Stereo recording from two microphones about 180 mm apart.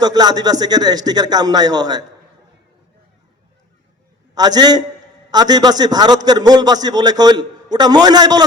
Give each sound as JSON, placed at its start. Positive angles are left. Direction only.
{"t": 0.0, "sound": "a man's voice", "side_deg": -20}
{"t": 4.4, "sound": "a man's voice", "side_deg": -20}